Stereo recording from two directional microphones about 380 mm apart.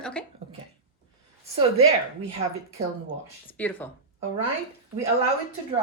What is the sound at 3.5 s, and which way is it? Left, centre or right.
Speech, centre.